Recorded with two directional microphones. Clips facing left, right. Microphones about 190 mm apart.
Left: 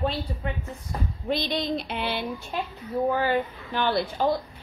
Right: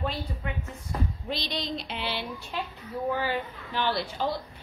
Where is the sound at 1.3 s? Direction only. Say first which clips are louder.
Left 8 dB; 55° left (ahead or behind).